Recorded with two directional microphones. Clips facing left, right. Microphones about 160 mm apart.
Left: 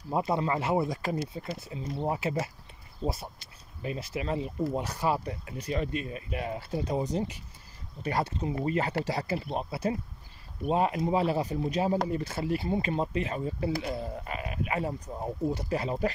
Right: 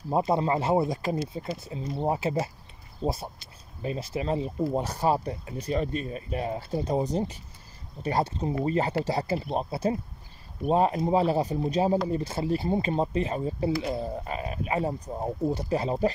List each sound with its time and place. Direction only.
0.1 s speech: 30° right (ahead or behind)